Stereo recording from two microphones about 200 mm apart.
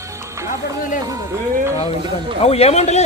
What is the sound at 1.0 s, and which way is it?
Speech, 15° right (ahead or behind).